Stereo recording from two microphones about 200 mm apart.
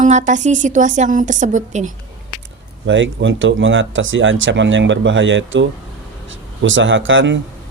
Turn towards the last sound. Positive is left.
turn(degrees=-70)  # may be behind; listen again after turning